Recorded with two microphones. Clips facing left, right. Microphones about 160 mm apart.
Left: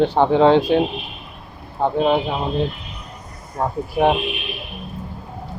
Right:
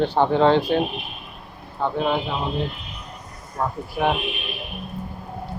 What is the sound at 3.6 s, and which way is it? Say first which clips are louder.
Speech: left 5 dB; 30° left (ahead or behind).